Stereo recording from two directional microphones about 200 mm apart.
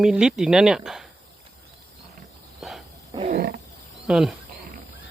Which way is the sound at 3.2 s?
50° right (ahead or behind).